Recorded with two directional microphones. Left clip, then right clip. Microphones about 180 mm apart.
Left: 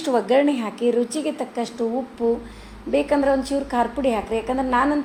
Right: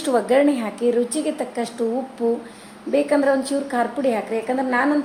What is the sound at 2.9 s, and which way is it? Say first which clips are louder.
A woman's voice: right 1 dB; 5° left (ahead or behind).